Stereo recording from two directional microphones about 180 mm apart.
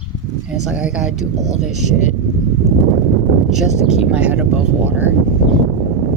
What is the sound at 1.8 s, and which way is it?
Speech, 40° left (ahead or behind).